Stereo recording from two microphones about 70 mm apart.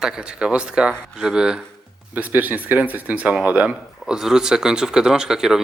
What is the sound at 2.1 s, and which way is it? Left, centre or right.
A man's voice, right.